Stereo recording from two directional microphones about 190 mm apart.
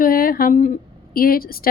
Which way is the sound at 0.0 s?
50° left (ahead or behind).